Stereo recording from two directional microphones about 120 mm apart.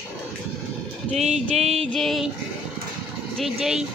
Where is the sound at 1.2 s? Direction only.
65° right (ahead or behind).